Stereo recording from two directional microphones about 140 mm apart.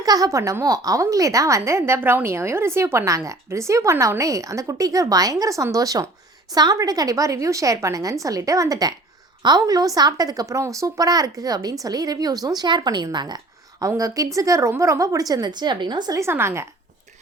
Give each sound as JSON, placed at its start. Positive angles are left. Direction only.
{"t": 0.0, "sound": "a woman's voice", "side_deg": -25}